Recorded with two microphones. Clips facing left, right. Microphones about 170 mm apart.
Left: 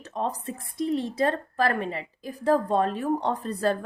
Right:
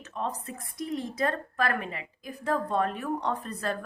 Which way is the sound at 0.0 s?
35° left (ahead or behind).